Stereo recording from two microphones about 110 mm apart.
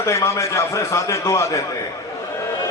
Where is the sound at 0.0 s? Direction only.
25° left (ahead or behind).